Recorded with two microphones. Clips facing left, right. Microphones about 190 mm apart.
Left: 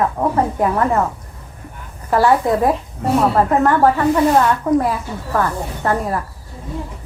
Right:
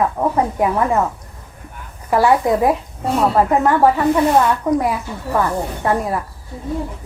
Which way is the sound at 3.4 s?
10° right (ahead or behind).